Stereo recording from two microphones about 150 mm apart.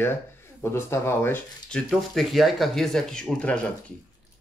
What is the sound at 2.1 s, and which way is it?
Speech, centre (ahead or behind).